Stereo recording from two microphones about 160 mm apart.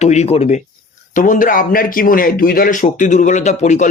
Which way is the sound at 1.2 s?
55° left (ahead or behind).